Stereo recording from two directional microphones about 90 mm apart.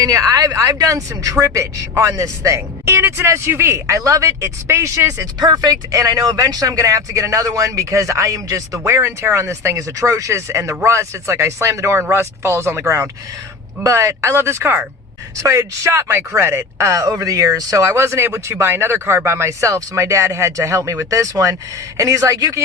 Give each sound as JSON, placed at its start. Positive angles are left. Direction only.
{"t": 0.0, "sound": "a woman's voice", "side_deg": -40}
{"t": 5.4, "sound": "speech", "side_deg": -50}
{"t": 5.7, "sound": "a woman's voice", "side_deg": -35}
{"t": 8.8, "sound": "a woman's voice", "side_deg": -25}